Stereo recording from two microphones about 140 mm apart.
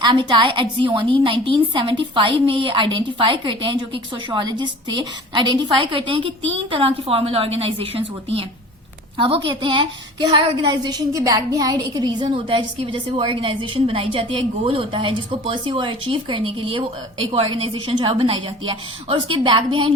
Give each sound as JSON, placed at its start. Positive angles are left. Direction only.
{"t": 0.0, "sound": "a woman's voice", "side_deg": -35}